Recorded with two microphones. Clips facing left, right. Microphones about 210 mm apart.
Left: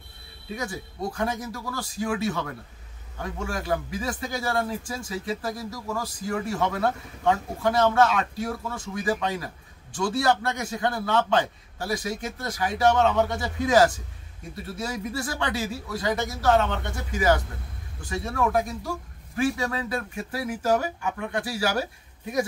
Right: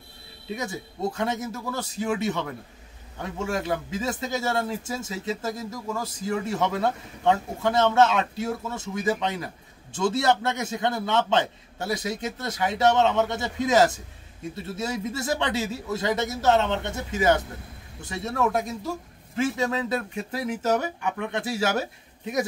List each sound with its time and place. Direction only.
0.6 s speech: 25° right (ahead or behind)
3.4 s speech: 25° right (ahead or behind)